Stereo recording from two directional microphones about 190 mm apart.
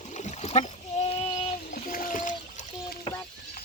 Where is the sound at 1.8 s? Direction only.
45° left (ahead or behind).